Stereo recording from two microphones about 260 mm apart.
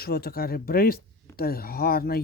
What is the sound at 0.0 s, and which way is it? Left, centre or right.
Speech, left.